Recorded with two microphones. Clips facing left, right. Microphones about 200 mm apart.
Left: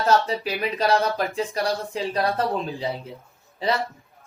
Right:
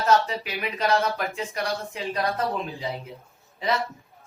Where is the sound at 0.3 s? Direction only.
35° left (ahead or behind).